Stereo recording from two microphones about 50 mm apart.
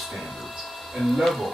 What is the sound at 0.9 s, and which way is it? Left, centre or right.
Speech, centre.